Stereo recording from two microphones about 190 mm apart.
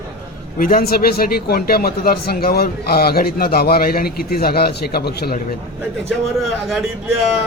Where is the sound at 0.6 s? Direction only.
50° left (ahead or behind).